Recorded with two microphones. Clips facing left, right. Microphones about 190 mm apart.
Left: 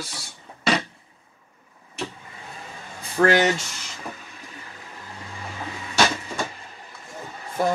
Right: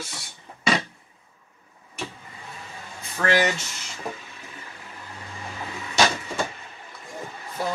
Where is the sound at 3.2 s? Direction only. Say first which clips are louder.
Left 6 dB; 35° left (ahead or behind).